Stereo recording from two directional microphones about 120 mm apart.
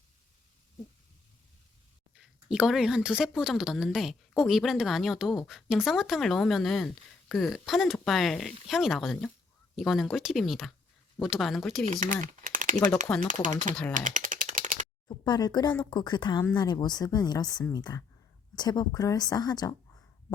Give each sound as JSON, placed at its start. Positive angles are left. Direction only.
{"t": 2.1, "sound": "speech", "side_deg": -5}
{"t": 11.9, "sound": "speech", "side_deg": -90}
{"t": 13.1, "sound": "speech", "side_deg": 25}
{"t": 13.9, "sound": "computer keyboard", "side_deg": -90}
{"t": 15.0, "sound": "speech", "side_deg": 35}